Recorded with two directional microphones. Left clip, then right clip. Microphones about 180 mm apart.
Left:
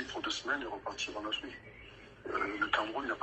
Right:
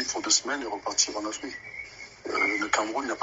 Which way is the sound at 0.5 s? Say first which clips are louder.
Right 5 dB; 40° right (ahead or behind).